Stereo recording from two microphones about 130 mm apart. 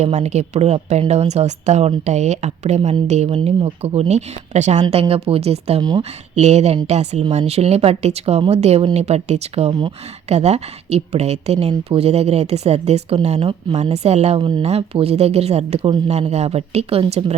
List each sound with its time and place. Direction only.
0.0 s speech: 60° right (ahead or behind)
3.2 s speech: 50° right (ahead or behind)
4.9 s speech: 50° right (ahead or behind)
14.6 s speech: 50° right (ahead or behind)